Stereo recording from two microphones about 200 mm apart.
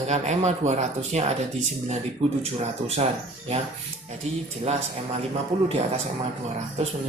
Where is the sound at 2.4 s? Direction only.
30° right (ahead or behind).